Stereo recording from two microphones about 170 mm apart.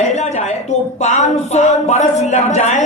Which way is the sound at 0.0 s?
45° left (ahead or behind).